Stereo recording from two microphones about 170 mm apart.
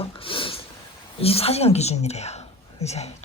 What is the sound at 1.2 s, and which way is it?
Speech, 35° left (ahead or behind).